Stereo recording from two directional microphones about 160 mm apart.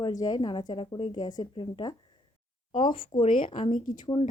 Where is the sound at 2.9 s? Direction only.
60° left (ahead or behind).